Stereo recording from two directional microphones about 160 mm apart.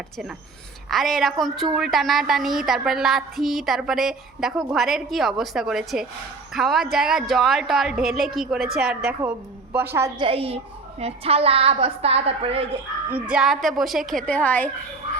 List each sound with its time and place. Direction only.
0.9 s a woman's voice: centre (ahead or behind)
10.2 s a woman's voice: 35° right (ahead or behind)
13.1 s a woman's voice: 10° right (ahead or behind); by 14.7 s 10° left (ahead or behind)